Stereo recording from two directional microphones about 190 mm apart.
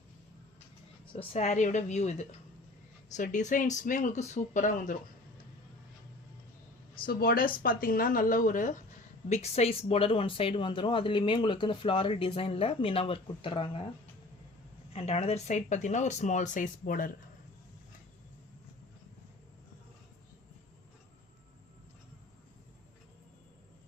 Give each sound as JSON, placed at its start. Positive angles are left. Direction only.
{"t": 1.1, "sound": "speech", "side_deg": 35}
{"t": 7.0, "sound": "speech", "side_deg": 50}
{"t": 14.9, "sound": "speech", "side_deg": 35}